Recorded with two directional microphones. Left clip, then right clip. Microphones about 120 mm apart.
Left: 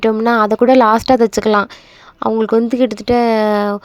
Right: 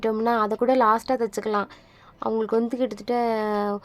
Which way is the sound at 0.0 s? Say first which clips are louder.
Left 9 dB; 45° left (ahead or behind).